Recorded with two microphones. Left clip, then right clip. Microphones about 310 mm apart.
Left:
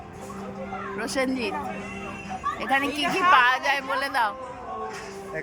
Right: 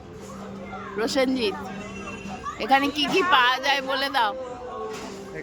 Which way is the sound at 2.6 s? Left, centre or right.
Centre.